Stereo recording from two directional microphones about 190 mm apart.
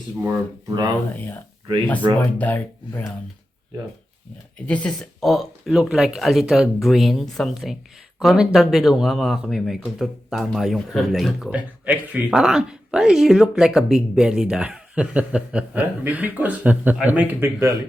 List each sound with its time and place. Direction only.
1.1 s speech: 10° left (ahead or behind)
2.0 s speech: 25° right (ahead or behind)
2.4 s speech: 10° left (ahead or behind)
4.6 s speech: 5° left (ahead or behind); by 17.7 s 10° right (ahead or behind)